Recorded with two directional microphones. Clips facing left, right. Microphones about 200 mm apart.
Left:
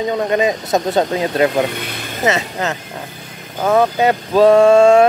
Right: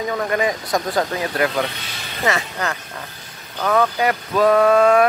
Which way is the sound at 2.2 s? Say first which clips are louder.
Left 4 dB; 20° left (ahead or behind).